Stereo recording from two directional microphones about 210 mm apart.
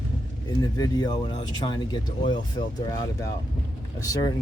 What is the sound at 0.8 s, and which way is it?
Speech, 20° left (ahead or behind).